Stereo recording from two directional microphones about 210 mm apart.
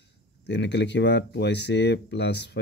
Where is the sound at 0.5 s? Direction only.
55° left (ahead or behind).